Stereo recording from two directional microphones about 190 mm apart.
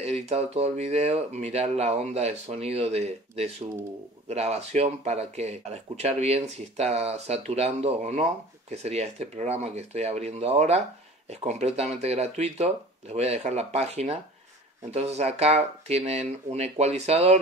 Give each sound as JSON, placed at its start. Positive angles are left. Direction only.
{"t": 0.0, "sound": "speech", "side_deg": -35}